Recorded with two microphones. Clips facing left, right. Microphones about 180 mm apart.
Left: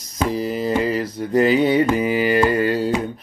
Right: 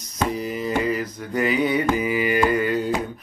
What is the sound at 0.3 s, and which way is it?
Mantra, 35° left (ahead or behind).